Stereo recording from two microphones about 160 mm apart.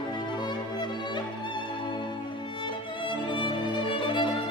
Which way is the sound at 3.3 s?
30° left (ahead or behind).